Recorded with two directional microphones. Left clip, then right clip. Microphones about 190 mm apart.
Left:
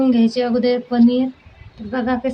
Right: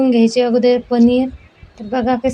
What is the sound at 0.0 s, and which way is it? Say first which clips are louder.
Speech: right 4 dB; 20° right (ahead or behind).